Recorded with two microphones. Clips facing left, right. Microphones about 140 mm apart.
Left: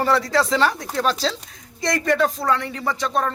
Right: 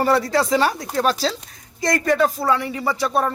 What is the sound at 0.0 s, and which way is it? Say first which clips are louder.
Speech: right 1 dB; 10° right (ahead or behind).